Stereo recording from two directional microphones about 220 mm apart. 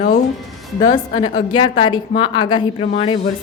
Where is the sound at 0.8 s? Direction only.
20° left (ahead or behind).